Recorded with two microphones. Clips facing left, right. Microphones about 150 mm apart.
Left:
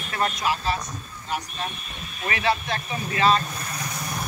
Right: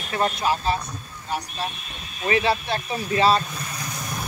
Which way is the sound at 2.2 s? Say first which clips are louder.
Right 3 dB; 30° right (ahead or behind).